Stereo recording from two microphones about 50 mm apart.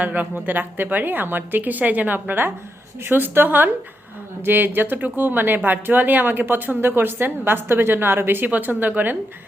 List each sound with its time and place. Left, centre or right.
0.0 s a woman's voice: right
8.4 s a woman's voice: right